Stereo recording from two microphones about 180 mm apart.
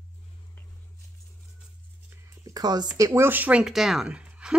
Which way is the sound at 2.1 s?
15° right (ahead or behind).